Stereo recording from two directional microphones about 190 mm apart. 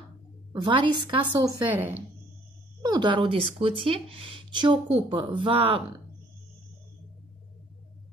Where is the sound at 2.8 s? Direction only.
25° right (ahead or behind).